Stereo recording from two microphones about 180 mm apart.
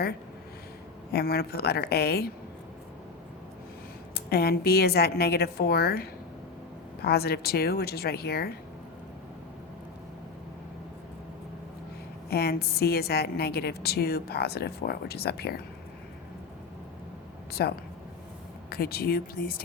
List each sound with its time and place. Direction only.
1.1 s a woman's voice: 60° left (ahead or behind)
4.1 s a woman's voice: 60° left (ahead or behind)
12.3 s a woman's voice: 60° left (ahead or behind)
17.5 s a woman's voice: 60° left (ahead or behind)